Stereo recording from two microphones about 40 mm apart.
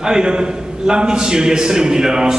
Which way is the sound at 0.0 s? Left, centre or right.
Centre.